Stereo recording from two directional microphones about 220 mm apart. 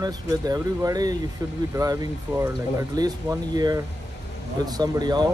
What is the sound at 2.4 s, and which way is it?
Speech, 15° right (ahead or behind).